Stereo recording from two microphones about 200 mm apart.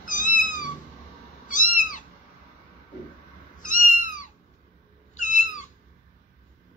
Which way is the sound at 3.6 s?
40° left (ahead or behind).